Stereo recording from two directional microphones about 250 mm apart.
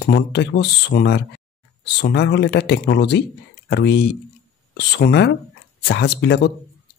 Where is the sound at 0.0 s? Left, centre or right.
Left.